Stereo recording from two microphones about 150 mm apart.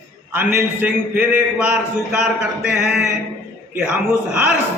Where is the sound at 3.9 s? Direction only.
10° right (ahead or behind).